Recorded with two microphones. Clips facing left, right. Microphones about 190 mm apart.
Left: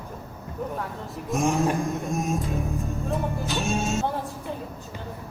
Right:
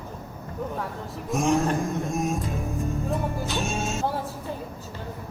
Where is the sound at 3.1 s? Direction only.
Centre (ahead or behind).